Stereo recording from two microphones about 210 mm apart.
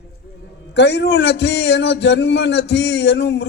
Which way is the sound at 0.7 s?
55° left (ahead or behind).